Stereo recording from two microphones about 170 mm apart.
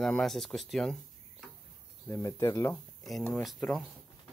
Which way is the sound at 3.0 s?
Centre (ahead or behind).